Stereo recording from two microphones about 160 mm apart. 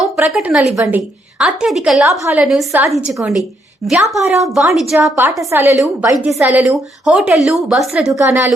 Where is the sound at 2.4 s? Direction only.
5° right (ahead or behind).